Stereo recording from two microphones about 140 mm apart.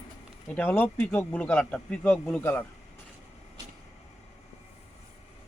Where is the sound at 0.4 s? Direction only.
10° left (ahead or behind).